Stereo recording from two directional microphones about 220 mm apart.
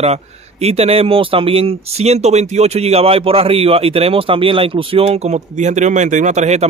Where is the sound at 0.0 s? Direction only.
30° right (ahead or behind).